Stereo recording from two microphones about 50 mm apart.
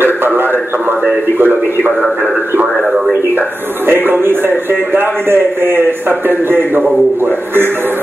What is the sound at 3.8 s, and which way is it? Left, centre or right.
Speech, right.